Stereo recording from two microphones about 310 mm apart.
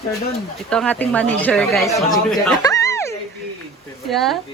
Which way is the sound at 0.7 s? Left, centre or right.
Centre.